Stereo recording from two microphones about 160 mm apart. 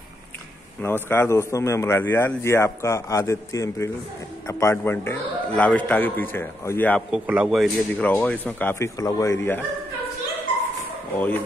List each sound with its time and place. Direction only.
0.8 s a man's voice: 15° left (ahead or behind)
7.1 s a man's voice: 5° right (ahead or behind); by 9.6 s 15° left (ahead or behind)
11.1 s a man's voice: 10° left (ahead or behind)